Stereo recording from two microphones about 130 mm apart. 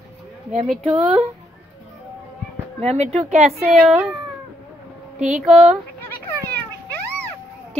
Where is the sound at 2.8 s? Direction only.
55° right (ahead or behind).